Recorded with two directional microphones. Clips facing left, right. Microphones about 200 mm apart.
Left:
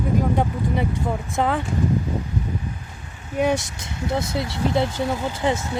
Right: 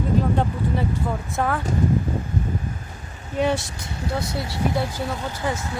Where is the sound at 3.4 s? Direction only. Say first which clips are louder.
Left 1 dB; 15° left (ahead or behind).